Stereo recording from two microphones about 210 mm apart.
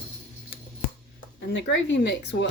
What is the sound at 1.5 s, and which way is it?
Speech, 60° left (ahead or behind).